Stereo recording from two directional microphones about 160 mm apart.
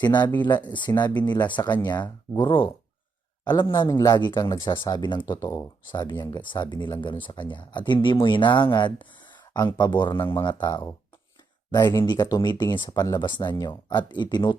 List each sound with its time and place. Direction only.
0.0 s speech: 25° left (ahead or behind)